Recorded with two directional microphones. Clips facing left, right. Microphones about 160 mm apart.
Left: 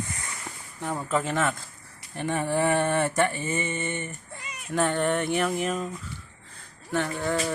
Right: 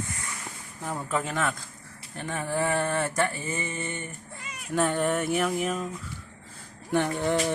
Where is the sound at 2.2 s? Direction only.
5° left (ahead or behind).